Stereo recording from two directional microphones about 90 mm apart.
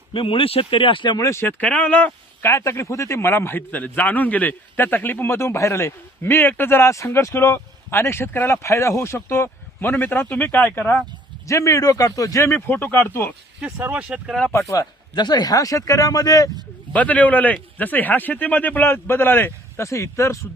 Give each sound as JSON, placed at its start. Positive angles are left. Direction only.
{"t": 0.1, "sound": "speech", "side_deg": 75}
{"t": 1.1, "sound": "speech", "side_deg": 35}
{"t": 2.4, "sound": "a man's voice", "side_deg": 30}
{"t": 11.4, "sound": "a man's voice", "side_deg": 35}
{"t": 12.5, "sound": "a man's voice", "side_deg": 20}
{"t": 13.6, "sound": "speech", "side_deg": -15}
{"t": 14.5, "sound": "a man's voice", "side_deg": 35}
{"t": 15.1, "sound": "speech", "side_deg": 50}
{"t": 16.9, "sound": "a man's voice", "side_deg": 15}